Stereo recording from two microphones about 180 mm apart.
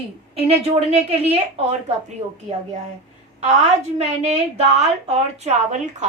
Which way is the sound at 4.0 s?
40° right (ahead or behind).